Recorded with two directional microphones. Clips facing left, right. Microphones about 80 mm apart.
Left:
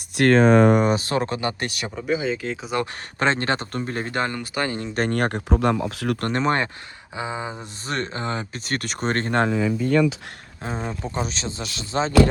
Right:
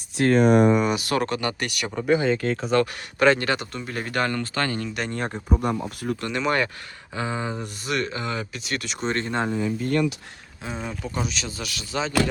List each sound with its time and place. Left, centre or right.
0.2 s speech: left
0.7 s speech: left
2.0 s speech: centre
2.7 s speech: left
5.1 s speech: left
6.1 s speech: left
7.2 s speech: centre
7.9 s speech: left
10.6 s speech: left